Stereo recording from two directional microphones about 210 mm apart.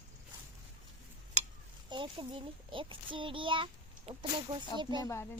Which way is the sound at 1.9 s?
25° right (ahead or behind).